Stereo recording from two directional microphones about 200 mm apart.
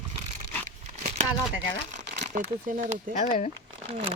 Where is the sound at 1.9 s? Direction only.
35° right (ahead or behind).